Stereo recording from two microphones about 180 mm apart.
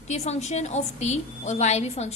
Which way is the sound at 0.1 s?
40° left (ahead or behind).